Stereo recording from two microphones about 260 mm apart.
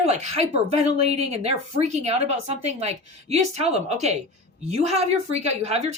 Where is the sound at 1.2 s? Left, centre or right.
Right.